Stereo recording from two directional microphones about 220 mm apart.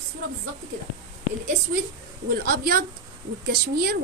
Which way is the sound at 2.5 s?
40° right (ahead or behind).